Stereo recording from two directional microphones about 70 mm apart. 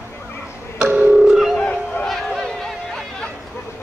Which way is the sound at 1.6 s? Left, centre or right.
Centre.